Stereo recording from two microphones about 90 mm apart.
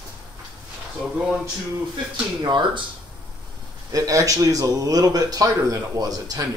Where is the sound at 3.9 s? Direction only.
40° right (ahead or behind).